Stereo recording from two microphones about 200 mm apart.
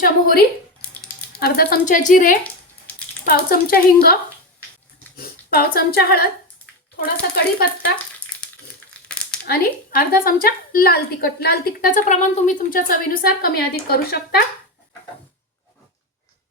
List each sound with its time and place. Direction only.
0.0 s a woman's voice: 50° left (ahead or behind)
5.1 s speech: 50° left (ahead or behind)
8.9 s crumpling: 5° left (ahead or behind)
9.5 s a woman's voice: 45° left (ahead or behind)